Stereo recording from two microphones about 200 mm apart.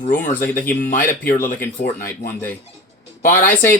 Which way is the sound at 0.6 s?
45° left (ahead or behind).